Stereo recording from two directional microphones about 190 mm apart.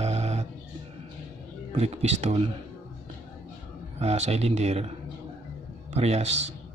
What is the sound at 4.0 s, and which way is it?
Speech, 35° right (ahead or behind).